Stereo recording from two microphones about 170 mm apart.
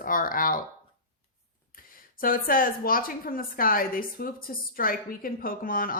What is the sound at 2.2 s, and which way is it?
A woman's voice, 55° left (ahead or behind).